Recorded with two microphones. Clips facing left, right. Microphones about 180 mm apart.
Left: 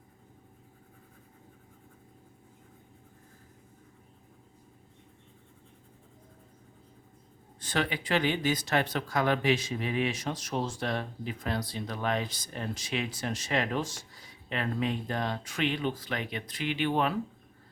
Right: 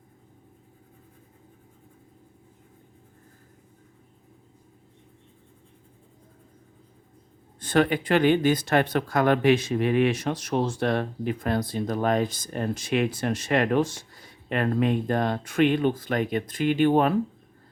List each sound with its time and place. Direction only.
7.6 s speech: 50° right (ahead or behind)